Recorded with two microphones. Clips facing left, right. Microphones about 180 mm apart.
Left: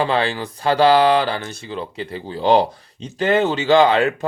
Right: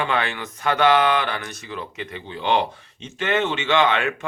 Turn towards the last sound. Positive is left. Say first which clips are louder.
# left 6 dB
turn(degrees=35)  # may be behind; listen again after turning